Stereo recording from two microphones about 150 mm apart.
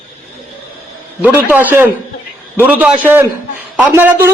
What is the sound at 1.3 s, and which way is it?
A man's voice, 10° right (ahead or behind).